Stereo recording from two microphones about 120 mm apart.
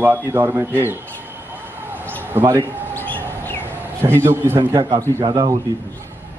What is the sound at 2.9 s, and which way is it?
Chirp, 15° left (ahead or behind).